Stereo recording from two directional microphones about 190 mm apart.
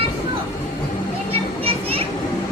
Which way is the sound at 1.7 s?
30° right (ahead or behind).